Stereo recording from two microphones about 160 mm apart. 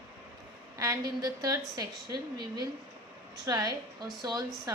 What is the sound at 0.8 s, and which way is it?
A woman's voice, 20° right (ahead or behind).